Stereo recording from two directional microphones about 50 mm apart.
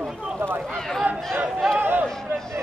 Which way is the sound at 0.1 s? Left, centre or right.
Centre.